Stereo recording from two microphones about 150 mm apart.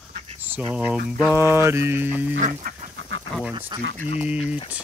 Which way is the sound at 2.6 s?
75° right (ahead or behind).